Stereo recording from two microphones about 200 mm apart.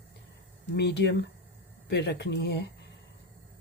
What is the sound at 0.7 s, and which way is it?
Speech, 60° left (ahead or behind).